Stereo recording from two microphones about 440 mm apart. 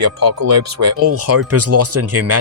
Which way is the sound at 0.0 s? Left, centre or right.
Right.